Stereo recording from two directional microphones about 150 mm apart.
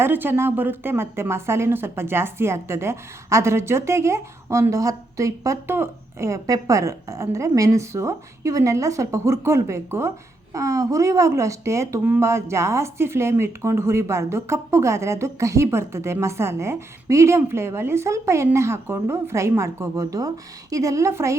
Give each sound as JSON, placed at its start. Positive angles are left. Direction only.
{"t": 0.0, "sound": "speech", "side_deg": -15}